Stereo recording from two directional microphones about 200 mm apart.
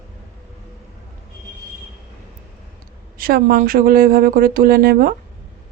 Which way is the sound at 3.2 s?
45° right (ahead or behind).